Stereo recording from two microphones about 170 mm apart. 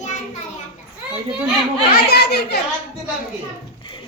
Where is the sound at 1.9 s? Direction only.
70° left (ahead or behind).